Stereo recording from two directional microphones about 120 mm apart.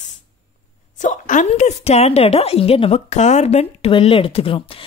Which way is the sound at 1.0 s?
90° left.